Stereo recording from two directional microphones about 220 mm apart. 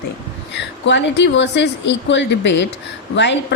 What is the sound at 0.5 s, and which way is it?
Speech, 50° left (ahead or behind).